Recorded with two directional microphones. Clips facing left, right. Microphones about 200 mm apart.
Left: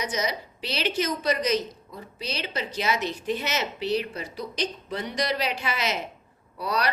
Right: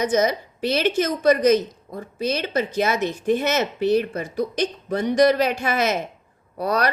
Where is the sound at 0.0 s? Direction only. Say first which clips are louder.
Right 9 dB; 50° right (ahead or behind).